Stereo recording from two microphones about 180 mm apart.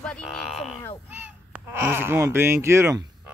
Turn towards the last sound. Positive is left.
turn(degrees=-15)  # may be behind; listen again after turning